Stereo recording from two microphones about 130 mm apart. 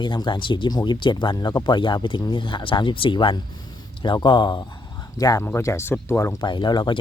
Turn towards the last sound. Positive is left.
turn(degrees=35)  # may be behind; listen again after turning